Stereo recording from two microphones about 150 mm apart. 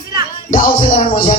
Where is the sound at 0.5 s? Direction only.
55° left (ahead or behind).